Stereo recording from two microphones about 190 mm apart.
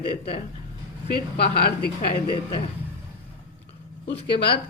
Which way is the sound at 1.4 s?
55° left (ahead or behind).